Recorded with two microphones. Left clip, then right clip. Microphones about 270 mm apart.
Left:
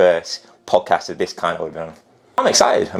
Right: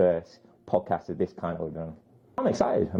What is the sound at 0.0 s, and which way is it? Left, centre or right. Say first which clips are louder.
Speech: left 10 dB; centre.